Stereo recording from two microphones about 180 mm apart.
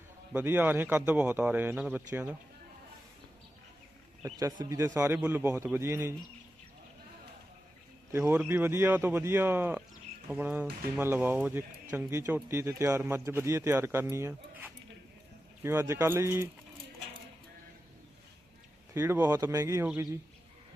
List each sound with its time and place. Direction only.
0.3 s speech: 10° right (ahead or behind)
4.2 s speech: 20° right (ahead or behind)
8.1 s speech: 15° right (ahead or behind)
18.9 s speech: 10° right (ahead or behind)